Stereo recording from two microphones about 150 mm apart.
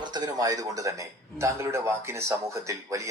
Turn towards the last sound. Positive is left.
turn(degrees=-20)  # may be behind; listen again after turning